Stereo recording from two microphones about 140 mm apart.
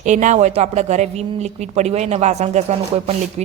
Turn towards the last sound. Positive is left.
turn(degrees=-50)  # may be behind; listen again after turning